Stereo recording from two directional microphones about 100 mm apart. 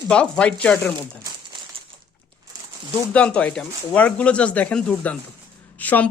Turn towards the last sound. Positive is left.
turn(degrees=15)  # may be behind; listen again after turning